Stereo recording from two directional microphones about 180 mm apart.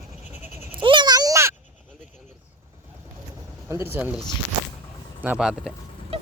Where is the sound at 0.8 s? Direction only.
25° right (ahead or behind).